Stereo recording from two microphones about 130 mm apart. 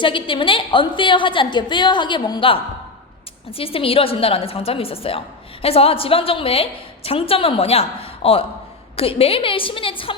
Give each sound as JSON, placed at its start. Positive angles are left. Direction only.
{"t": 0.0, "sound": "a woman's voice", "side_deg": 40}